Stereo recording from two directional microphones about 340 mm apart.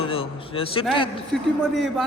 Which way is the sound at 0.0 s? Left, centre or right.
Centre.